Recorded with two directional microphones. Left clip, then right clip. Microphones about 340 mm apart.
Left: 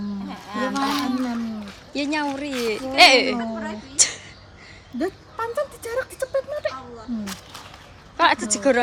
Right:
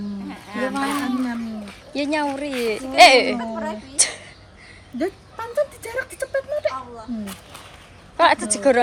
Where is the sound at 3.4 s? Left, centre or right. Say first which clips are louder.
Right 2 dB; centre.